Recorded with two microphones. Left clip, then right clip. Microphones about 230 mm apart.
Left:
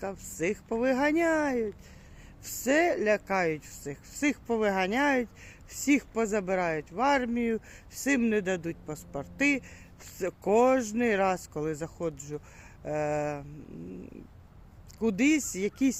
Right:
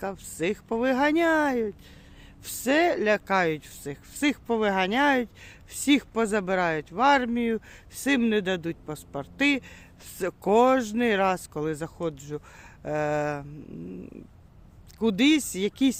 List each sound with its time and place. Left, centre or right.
0.0 s speech: centre
14.9 s speech: centre